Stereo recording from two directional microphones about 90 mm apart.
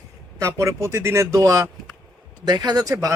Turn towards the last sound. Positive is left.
turn(degrees=-40)  # may be behind; listen again after turning